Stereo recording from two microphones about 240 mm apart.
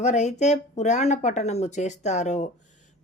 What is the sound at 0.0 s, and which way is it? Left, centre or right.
Speech, left.